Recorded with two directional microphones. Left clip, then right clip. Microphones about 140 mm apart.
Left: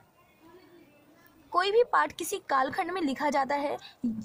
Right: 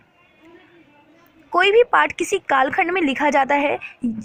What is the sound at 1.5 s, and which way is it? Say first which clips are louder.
A woman's voice: right 10 dB; 15° right (ahead or behind).